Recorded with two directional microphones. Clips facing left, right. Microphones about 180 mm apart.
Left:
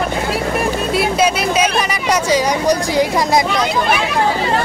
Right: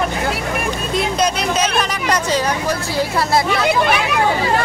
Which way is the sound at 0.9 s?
5° left (ahead or behind).